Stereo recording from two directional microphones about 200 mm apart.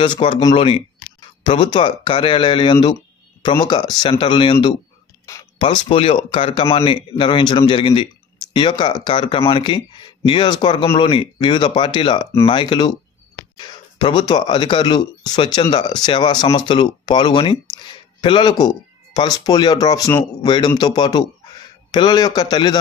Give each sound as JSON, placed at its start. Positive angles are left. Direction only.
{"t": 0.0, "sound": "speech", "side_deg": 25}
{"t": 5.2, "sound": "speech", "side_deg": 15}